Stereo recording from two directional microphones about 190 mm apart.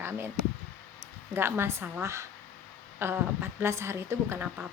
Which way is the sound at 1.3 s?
10° right (ahead or behind).